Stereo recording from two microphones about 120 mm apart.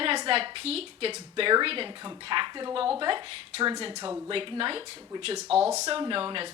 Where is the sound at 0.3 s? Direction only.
50° right (ahead or behind).